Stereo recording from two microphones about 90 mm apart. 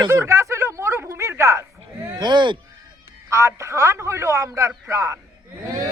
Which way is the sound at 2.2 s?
55° right (ahead or behind).